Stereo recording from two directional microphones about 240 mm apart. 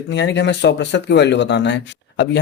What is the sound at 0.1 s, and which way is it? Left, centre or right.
Speech, left.